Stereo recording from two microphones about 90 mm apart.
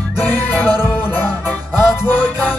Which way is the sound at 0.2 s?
20° left (ahead or behind).